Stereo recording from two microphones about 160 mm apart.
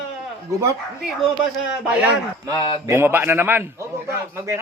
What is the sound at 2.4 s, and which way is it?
Speech, 20° right (ahead or behind).